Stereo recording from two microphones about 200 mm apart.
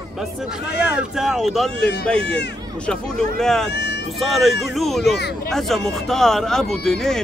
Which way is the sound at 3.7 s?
60° left (ahead or behind).